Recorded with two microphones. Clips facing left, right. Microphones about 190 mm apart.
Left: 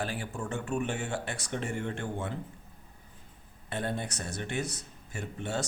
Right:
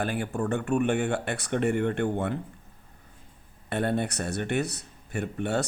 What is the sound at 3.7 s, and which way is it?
Speech, 60° right (ahead or behind).